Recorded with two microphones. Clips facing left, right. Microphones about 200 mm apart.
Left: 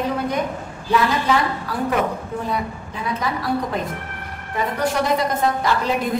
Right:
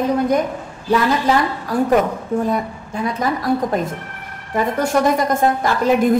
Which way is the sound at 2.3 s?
45° right (ahead or behind).